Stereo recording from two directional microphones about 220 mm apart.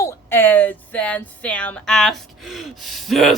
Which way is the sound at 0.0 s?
10° left (ahead or behind).